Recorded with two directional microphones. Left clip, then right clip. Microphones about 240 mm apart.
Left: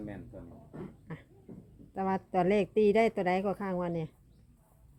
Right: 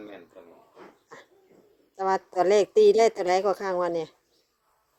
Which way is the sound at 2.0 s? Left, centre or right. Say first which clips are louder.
Right 6 dB; right.